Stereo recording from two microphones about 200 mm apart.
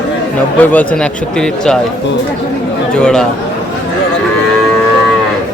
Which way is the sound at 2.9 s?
5° left (ahead or behind).